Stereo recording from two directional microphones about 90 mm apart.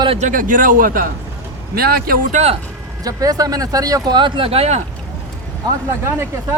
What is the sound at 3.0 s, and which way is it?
Speech, 40° right (ahead or behind).